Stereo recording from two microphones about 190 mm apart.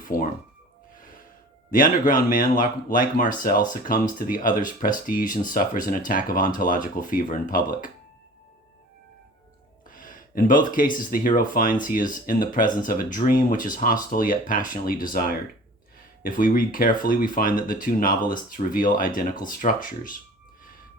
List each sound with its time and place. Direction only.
0.0 s speech: 45° left (ahead or behind)
1.7 s speech: 45° left (ahead or behind)
9.9 s speech: 45° left (ahead or behind)